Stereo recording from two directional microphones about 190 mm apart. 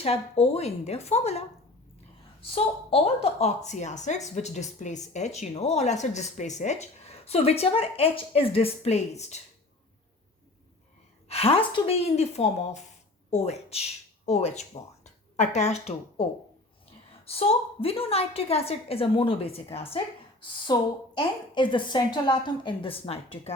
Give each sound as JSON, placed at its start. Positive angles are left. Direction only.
{"t": 0.0, "sound": "a woman's voice", "side_deg": 30}
{"t": 2.9, "sound": "a woman's voice", "side_deg": 30}
{"t": 11.3, "sound": "a woman's voice", "side_deg": 30}
{"t": 17.2, "sound": "a woman's voice", "side_deg": 30}